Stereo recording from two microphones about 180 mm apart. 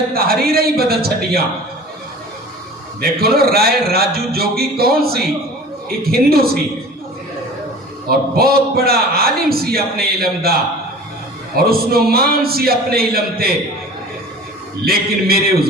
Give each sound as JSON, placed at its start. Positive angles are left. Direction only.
{"t": 0.1, "sound": "a man's voice", "side_deg": -55}
{"t": 3.0, "sound": "a man's voice", "side_deg": -60}
{"t": 8.1, "sound": "a man's voice", "side_deg": -60}
{"t": 11.5, "sound": "a man's voice", "side_deg": -60}
{"t": 14.8, "sound": "a man's voice", "side_deg": -55}